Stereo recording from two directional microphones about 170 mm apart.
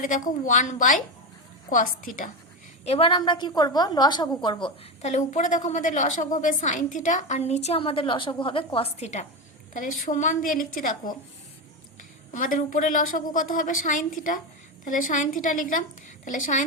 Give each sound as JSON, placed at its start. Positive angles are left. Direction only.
{"t": 0.0, "sound": "a woman's voice", "side_deg": 50}
{"t": 2.8, "sound": "a woman's voice", "side_deg": 35}
{"t": 5.0, "sound": "a woman's voice", "side_deg": 40}
{"t": 9.7, "sound": "a woman's voice", "side_deg": 50}
{"t": 12.3, "sound": "a woman's voice", "side_deg": 50}